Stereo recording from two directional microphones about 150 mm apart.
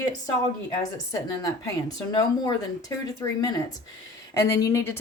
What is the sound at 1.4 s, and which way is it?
Speech, 25° left (ahead or behind).